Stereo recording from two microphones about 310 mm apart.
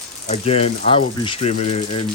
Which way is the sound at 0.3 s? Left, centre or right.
Centre.